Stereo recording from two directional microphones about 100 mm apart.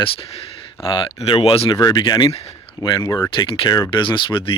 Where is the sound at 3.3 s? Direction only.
55° left (ahead or behind).